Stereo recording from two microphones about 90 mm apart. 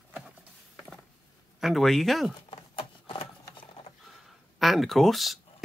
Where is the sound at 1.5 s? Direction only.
Centre (ahead or behind).